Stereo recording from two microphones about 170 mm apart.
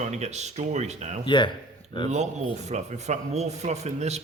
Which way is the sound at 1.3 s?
25° left (ahead or behind).